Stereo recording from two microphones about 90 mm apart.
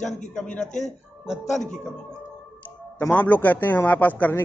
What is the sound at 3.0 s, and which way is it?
A man's voice, 20° left (ahead or behind).